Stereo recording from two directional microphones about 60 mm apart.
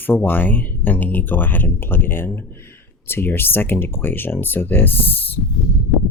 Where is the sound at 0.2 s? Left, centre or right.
Left.